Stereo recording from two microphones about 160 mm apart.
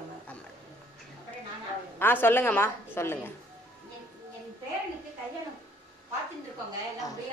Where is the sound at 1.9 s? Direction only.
15° left (ahead or behind).